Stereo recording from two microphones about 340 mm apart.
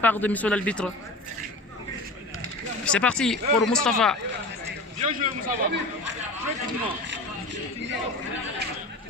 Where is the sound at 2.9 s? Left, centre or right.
Centre.